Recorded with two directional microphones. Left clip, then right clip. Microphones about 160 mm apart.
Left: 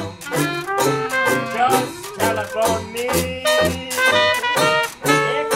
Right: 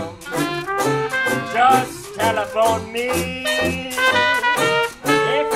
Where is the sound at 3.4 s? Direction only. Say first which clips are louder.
Left 5 dB; 20° left (ahead or behind).